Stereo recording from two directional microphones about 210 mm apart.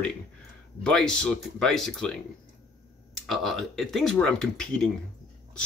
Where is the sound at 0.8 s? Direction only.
5° left (ahead or behind).